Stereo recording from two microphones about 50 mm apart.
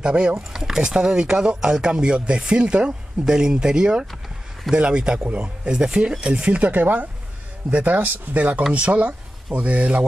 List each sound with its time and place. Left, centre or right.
0.0 s speech: centre
6.7 s speech: right
8.7 s speech: right